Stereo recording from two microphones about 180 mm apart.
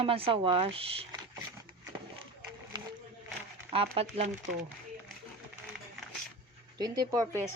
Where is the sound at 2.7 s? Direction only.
25° right (ahead or behind).